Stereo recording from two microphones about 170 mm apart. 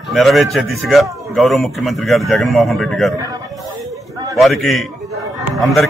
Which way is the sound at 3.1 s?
20° right (ahead or behind).